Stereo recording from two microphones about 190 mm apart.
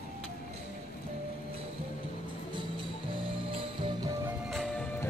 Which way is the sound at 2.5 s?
25° right (ahead or behind).